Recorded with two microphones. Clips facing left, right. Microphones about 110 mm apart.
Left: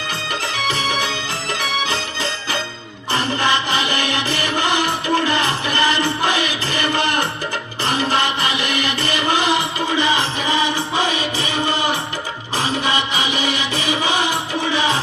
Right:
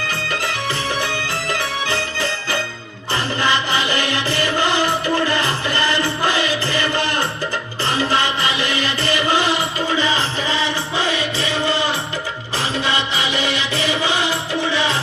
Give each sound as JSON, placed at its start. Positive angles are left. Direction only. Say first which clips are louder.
{"t": 0.1, "sound": "music", "louder": "left 1 dB", "side_deg": 15}